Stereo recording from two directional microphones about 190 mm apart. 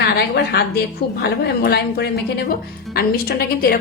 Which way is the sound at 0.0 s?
60° left (ahead or behind).